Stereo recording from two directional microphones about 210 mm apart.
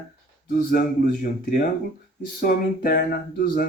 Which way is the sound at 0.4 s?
40° left (ahead or behind).